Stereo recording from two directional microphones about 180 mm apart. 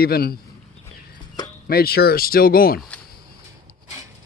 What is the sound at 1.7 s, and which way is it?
Speech, 60° left (ahead or behind).